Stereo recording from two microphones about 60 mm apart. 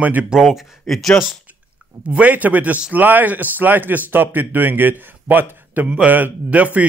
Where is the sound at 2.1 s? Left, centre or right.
Right.